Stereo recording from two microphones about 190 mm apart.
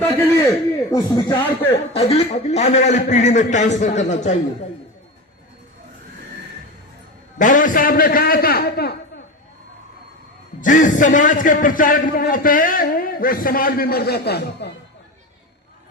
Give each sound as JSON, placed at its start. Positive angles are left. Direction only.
{"t": 0.0, "sound": "a sound", "side_deg": 10}
{"t": 0.9, "sound": "speech", "side_deg": 20}
{"t": 1.9, "sound": "a man's voice", "side_deg": 30}
{"t": 7.3, "sound": "a man's voice", "side_deg": 45}
{"t": 10.6, "sound": "a man's voice", "side_deg": 40}